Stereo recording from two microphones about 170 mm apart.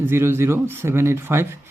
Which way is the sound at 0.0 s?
15° right (ahead or behind).